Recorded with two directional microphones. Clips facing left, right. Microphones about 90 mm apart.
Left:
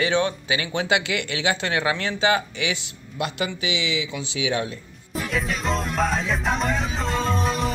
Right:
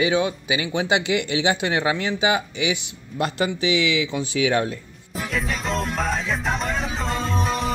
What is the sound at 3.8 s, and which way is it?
Speech, 55° right (ahead or behind).